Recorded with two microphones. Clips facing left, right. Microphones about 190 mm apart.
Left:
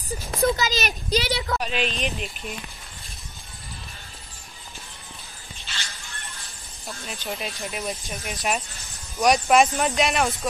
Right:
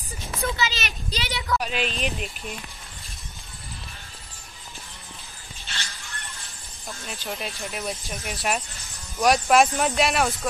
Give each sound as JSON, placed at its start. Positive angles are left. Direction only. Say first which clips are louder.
{"t": 0.3, "sound": "a woman's voice", "louder": "left 5 dB", "side_deg": 35}
{"t": 1.6, "sound": "speech", "louder": "left 1 dB", "side_deg": -5}
{"t": 7.1, "sound": "speech", "louder": "left 1 dB", "side_deg": 0}